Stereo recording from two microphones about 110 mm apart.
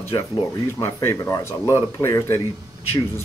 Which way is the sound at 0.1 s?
45° left (ahead or behind).